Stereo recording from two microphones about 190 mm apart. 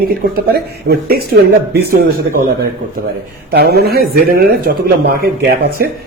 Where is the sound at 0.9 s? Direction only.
55° right (ahead or behind).